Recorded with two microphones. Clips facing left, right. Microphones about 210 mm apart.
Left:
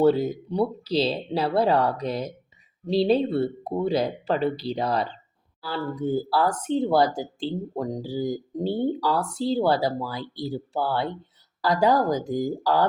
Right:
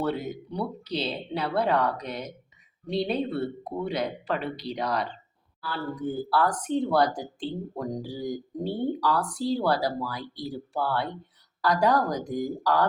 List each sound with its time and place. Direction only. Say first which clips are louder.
0.0 s speech: left 9 dB; 30° left (ahead or behind)